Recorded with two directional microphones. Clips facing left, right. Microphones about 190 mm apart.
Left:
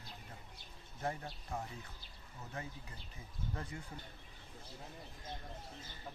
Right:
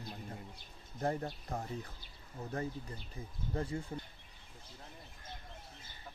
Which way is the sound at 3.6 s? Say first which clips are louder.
Right 11 dB; 30° right (ahead or behind).